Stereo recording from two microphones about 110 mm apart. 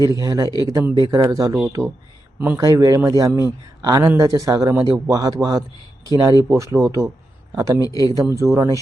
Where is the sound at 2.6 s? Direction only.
35° right (ahead or behind).